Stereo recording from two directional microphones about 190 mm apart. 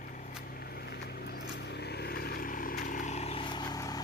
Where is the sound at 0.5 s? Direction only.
55° left (ahead or behind).